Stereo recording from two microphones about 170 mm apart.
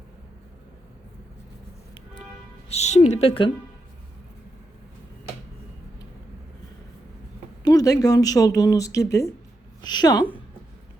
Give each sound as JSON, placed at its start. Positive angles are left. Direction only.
{"t": 2.6, "sound": "a woman's voice", "side_deg": 40}
{"t": 7.6, "sound": "a woman's voice", "side_deg": 20}